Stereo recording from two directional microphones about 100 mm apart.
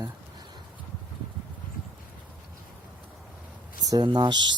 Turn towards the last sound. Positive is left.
turn(degrees=-50)  # may be behind; listen again after turning